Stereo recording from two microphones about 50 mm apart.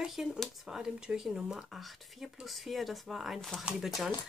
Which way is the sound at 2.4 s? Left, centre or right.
Centre.